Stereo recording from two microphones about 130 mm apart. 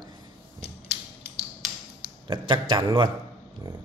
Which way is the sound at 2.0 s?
35° right (ahead or behind).